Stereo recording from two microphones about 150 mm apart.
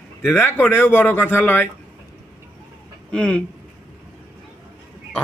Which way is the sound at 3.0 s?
10° left (ahead or behind).